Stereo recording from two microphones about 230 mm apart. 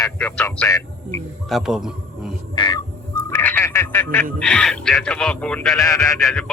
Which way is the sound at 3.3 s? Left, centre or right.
Centre.